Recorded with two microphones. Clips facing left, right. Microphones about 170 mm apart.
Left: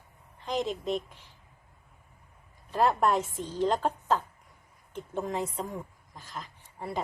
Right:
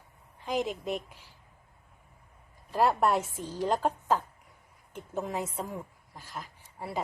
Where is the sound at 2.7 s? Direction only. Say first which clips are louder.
Even; 10° right (ahead or behind).